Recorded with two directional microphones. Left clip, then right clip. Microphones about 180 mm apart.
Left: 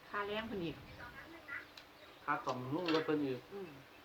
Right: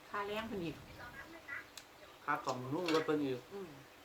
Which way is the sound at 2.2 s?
15° right (ahead or behind).